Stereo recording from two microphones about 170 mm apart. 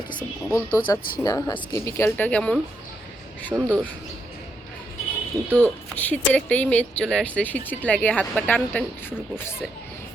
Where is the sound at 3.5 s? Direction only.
10° right (ahead or behind).